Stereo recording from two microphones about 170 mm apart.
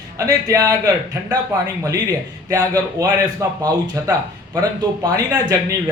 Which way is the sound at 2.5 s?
20° right (ahead or behind).